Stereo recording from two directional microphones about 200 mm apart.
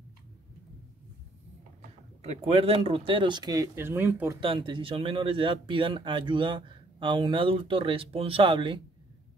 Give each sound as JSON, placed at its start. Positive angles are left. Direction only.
{"t": 2.2, "sound": "speech", "side_deg": -30}
{"t": 4.4, "sound": "speech", "side_deg": -25}